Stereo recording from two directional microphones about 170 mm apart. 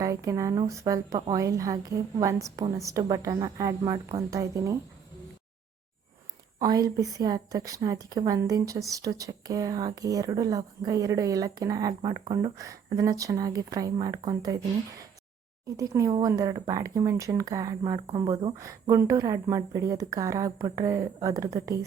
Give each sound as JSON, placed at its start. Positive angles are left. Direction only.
{"t": 0.0, "sound": "speech", "side_deg": -20}
{"t": 6.6, "sound": "speech", "side_deg": -20}
{"t": 15.6, "sound": "speech", "side_deg": -20}